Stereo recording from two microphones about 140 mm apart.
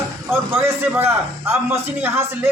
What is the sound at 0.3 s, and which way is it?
A man's voice, 15° right (ahead or behind).